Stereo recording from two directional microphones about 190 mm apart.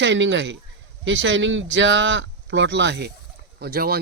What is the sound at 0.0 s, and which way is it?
Speech, 70° right (ahead or behind).